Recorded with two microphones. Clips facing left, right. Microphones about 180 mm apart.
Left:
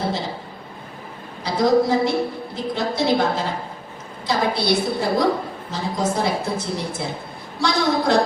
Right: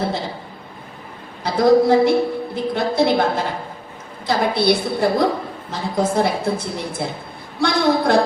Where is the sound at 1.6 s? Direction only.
55° right (ahead or behind).